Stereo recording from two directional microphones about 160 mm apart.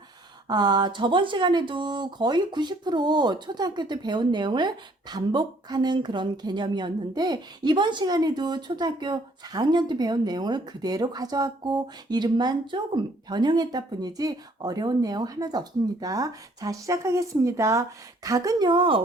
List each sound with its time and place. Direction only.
0.4 s speech: 25° right (ahead or behind)